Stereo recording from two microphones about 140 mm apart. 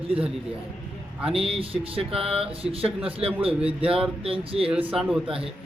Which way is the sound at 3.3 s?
10° right (ahead or behind).